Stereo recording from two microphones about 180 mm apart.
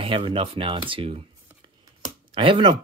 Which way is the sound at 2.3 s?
30° right (ahead or behind).